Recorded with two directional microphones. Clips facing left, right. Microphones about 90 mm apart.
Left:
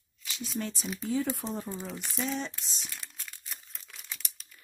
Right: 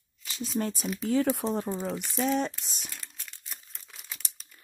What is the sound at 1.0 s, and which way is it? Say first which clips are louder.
Speech: right 5 dB; 75° right (ahead or behind).